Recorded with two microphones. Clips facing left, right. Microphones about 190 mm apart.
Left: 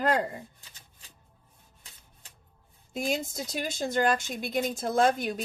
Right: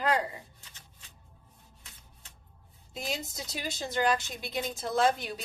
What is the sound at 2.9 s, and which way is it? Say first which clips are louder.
A woman's voice: left 6 dB; 50° left (ahead or behind).